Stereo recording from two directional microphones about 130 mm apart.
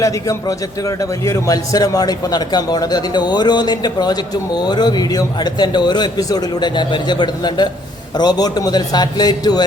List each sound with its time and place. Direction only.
0.0 s a man's voice: 25° left (ahead or behind)